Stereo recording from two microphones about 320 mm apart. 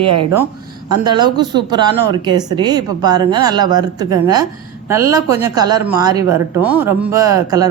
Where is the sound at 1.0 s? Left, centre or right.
Centre.